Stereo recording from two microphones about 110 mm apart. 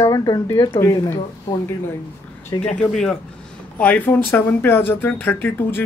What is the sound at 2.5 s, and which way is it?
Speech, 45° left (ahead or behind).